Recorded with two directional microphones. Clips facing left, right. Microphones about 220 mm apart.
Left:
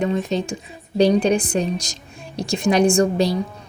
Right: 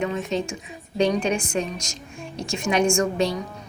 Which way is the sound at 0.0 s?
35° left (ahead or behind).